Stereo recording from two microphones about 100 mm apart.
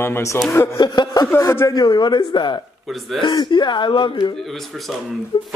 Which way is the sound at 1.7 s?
45° left (ahead or behind).